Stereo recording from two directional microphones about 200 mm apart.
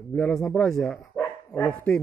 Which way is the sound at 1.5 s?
15° left (ahead or behind).